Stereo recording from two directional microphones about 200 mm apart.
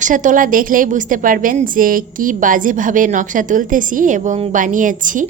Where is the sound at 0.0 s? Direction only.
40° right (ahead or behind).